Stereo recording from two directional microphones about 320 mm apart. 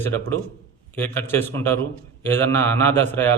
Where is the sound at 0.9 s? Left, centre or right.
Centre.